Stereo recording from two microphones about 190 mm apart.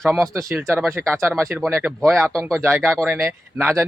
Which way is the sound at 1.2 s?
10° right (ahead or behind).